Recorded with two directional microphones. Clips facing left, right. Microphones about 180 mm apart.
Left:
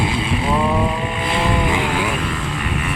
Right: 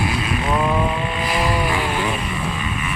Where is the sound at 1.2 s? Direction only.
25° left (ahead or behind).